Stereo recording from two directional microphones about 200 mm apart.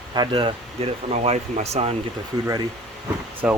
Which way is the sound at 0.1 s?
20° right (ahead or behind).